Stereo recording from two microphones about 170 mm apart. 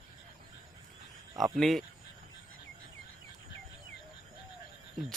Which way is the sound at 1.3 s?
Centre (ahead or behind).